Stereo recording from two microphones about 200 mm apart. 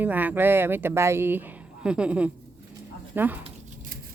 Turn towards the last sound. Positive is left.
turn(degrees=-10)  # may be behind; listen again after turning